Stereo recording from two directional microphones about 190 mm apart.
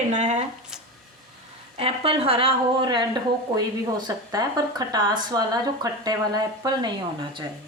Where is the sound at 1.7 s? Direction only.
30° right (ahead or behind).